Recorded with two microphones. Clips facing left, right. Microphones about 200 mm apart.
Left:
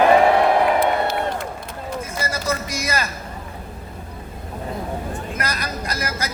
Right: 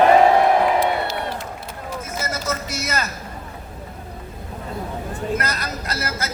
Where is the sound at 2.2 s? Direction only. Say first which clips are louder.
Left 2 dB; 10° left (ahead or behind).